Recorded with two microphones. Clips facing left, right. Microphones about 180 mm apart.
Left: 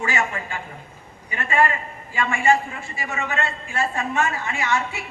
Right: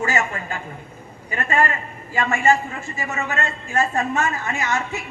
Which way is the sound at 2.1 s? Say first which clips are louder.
Right 1 dB; 40° right (ahead or behind).